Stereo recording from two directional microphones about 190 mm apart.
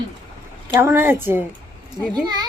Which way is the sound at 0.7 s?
10° right (ahead or behind).